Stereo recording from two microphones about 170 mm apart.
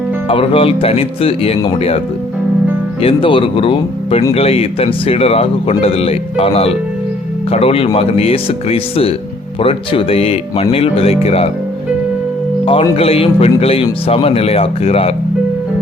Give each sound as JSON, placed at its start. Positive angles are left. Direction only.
{"t": 0.3, "sound": "speech", "side_deg": 35}
{"t": 3.0, "sound": "speech", "side_deg": 30}
{"t": 12.6, "sound": "speech", "side_deg": 35}